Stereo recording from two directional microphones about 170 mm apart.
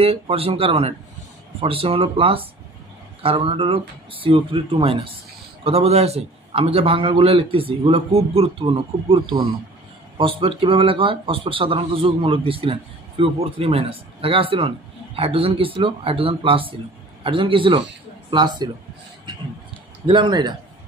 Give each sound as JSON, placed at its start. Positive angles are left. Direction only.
{"t": 0.0, "sound": "a man's voice", "side_deg": -35}
{"t": 20.1, "sound": "speech", "side_deg": -25}